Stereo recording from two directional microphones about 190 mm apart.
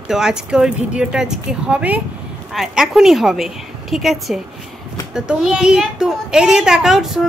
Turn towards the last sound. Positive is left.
turn(degrees=-5)  # may be behind; listen again after turning